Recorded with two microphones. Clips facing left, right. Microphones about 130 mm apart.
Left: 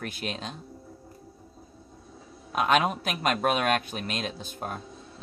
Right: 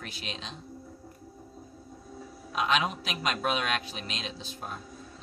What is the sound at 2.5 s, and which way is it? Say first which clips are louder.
A man's voice: left 4 dB; 50° left (ahead or behind).